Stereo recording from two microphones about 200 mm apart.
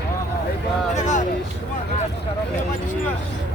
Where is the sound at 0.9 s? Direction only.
35° left (ahead or behind).